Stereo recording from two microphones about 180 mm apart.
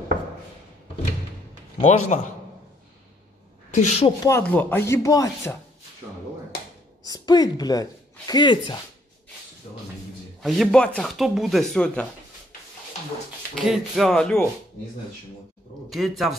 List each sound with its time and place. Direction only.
1.8 s a man's voice: 40° left (ahead or behind)
3.7 s a man's voice: 40° left (ahead or behind)
4.2 s chopping: 10° left (ahead or behind)
7.1 s speech: 20° left (ahead or behind)
10.4 s speech: centre (ahead or behind)
13.7 s speech: centre (ahead or behind)
15.9 s speech: centre (ahead or behind)